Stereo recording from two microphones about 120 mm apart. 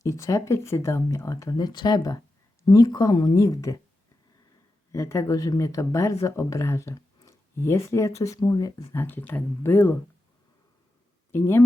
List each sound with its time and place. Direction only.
0.0 s speech: 25° left (ahead or behind)
4.9 s speech: 25° left (ahead or behind)
9.0 s speech: 15° left (ahead or behind)
11.3 s speech: 20° left (ahead or behind)